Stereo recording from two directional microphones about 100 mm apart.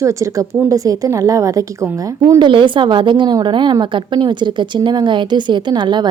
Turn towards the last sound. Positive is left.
turn(degrees=-45)  # may be behind; listen again after turning